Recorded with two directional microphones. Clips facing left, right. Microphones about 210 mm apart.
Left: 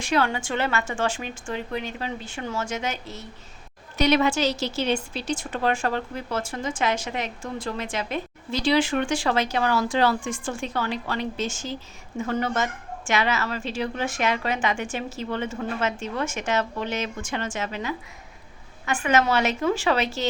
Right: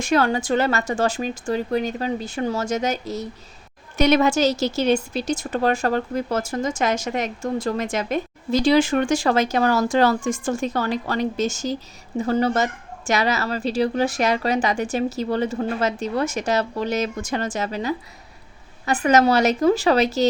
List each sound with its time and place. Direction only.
0.0 s a woman's voice: 40° right (ahead or behind)